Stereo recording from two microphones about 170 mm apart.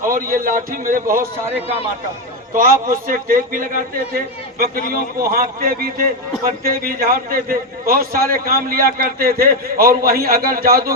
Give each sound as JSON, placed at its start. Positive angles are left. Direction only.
{"t": 0.1, "sound": "a man's voice", "side_deg": -55}
{"t": 2.6, "sound": "a man's voice", "side_deg": -55}